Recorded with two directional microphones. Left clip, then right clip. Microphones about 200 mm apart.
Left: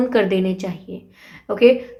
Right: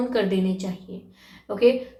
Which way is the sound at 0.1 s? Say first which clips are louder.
Left 6 dB; 45° left (ahead or behind).